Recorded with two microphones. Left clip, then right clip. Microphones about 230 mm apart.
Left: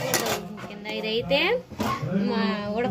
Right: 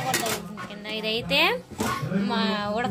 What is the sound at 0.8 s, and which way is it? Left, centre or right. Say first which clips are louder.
A woman's voice: left 1 dB; right.